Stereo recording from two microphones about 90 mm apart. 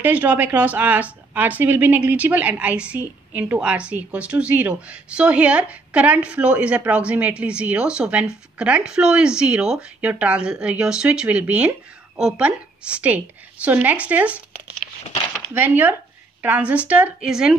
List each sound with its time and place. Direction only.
0.0 s a woman's voice: 20° right (ahead or behind)
15.5 s a woman's voice: 20° right (ahead or behind)